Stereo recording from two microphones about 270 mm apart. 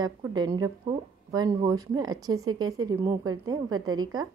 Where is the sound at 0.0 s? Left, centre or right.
Centre.